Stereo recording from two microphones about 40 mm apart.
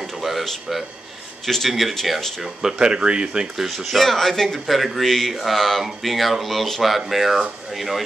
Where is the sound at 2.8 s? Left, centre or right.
Right.